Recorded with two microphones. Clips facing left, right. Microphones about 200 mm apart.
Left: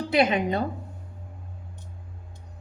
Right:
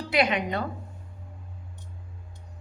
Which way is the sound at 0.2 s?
25° left (ahead or behind).